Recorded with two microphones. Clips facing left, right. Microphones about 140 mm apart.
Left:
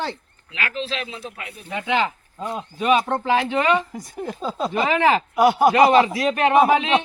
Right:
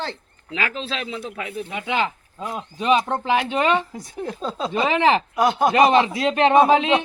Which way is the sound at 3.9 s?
Centre (ahead or behind).